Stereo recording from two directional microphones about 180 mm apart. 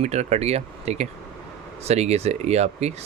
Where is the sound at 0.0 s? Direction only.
40° right (ahead or behind).